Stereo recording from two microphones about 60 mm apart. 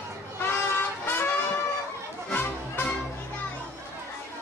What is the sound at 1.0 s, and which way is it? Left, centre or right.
Vehicle, left.